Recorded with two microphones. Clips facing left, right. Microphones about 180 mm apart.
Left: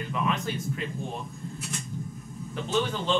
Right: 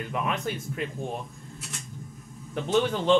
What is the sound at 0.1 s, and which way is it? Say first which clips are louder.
Speech: left 1 dB; 60° right (ahead or behind).